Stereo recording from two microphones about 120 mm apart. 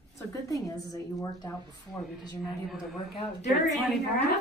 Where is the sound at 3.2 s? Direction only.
75° left (ahead or behind).